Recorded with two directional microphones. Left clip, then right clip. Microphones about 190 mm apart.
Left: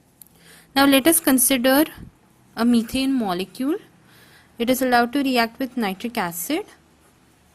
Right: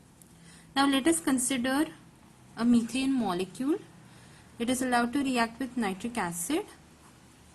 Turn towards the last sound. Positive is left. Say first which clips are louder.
# left 6 dB
turn(degrees=40)  # may be behind; listen again after turning